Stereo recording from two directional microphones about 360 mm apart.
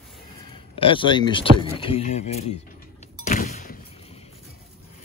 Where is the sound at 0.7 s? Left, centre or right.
Centre.